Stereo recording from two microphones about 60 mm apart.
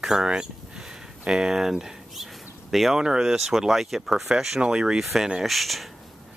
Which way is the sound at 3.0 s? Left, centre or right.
Centre.